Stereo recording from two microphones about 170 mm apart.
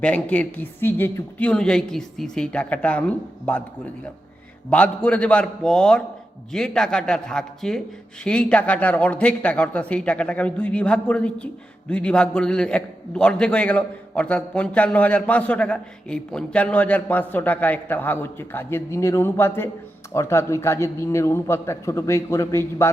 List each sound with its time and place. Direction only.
0.0 s a man's voice: 5° left (ahead or behind)
4.7 s a man's voice: 5° left (ahead or behind)